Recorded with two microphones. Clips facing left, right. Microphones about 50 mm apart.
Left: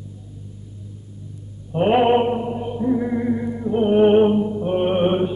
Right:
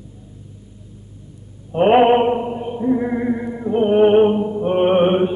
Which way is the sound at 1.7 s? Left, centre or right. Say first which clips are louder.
Right 4 dB; right.